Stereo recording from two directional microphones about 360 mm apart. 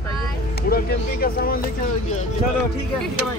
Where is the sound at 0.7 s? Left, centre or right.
Left.